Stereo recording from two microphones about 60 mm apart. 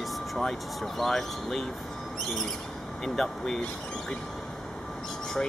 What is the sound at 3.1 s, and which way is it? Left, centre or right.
Speech, centre.